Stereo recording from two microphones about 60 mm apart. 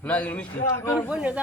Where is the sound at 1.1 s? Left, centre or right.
Centre.